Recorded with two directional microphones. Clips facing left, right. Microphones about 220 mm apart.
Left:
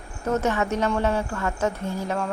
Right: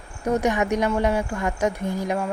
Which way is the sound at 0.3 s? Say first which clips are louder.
Right 2 dB; 15° right (ahead or behind).